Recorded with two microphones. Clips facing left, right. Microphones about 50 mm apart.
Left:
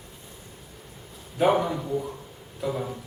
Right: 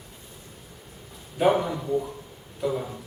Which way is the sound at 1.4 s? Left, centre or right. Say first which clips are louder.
Even; centre.